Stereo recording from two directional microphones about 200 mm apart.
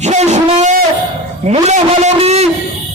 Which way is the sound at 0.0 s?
35° right (ahead or behind).